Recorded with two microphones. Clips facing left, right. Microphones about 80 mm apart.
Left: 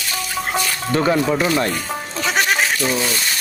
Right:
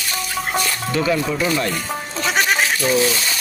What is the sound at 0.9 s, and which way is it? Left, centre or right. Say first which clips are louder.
Speech: left 3 dB; left.